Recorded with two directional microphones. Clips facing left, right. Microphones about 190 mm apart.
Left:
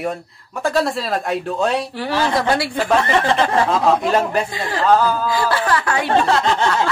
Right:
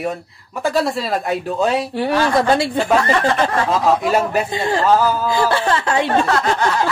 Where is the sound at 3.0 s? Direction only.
25° left (ahead or behind).